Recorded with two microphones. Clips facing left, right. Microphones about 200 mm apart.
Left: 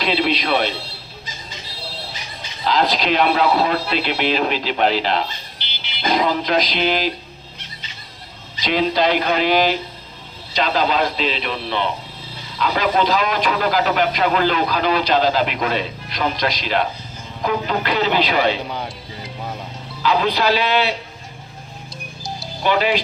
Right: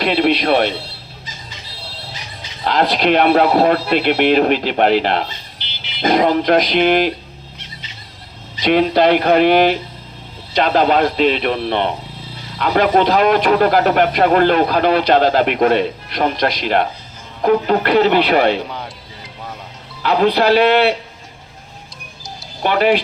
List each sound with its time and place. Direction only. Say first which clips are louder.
0.0 s speech: right 5 dB; 55° right (ahead or behind)
2.6 s speech: right 3 dB; 60° right (ahead or behind)
8.6 s speech: right 5 dB; 60° right (ahead or behind)
20.0 s speech: right 4 dB; 60° right (ahead or behind)
22.6 s speech: right 4 dB; 55° right (ahead or behind)